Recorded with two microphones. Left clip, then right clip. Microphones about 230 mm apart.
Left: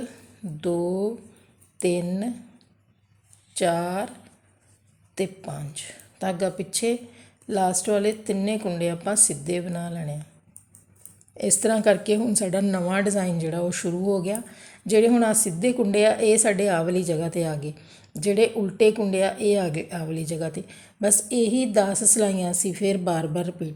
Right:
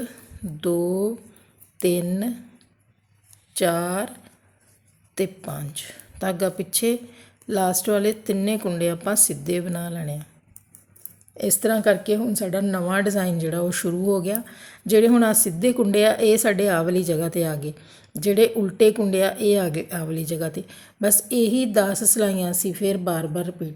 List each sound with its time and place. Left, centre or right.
0.6 s a woman's voice: right
11.3 s a woman's voice: centre